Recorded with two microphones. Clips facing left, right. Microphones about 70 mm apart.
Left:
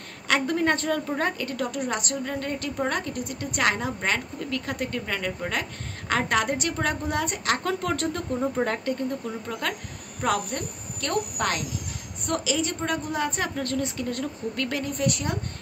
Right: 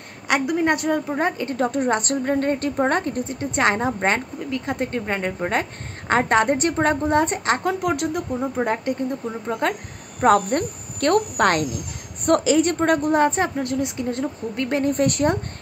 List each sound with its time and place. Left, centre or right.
0.3 s a woman's voice: centre; by 4.2 s right
4.4 s a woman's voice: right
10.2 s a woman's voice: right
13.6 s a woman's voice: centre
14.8 s a woman's voice: right